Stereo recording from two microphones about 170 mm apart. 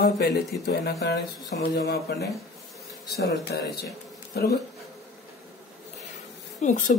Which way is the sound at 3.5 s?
70° left (ahead or behind).